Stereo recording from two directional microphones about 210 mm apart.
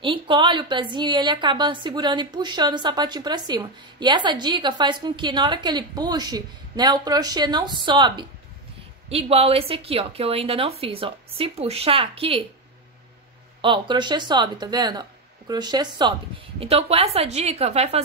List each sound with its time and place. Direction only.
0.0 s a woman's voice: 25° right (ahead or behind)
13.6 s a woman's voice: 25° right (ahead or behind)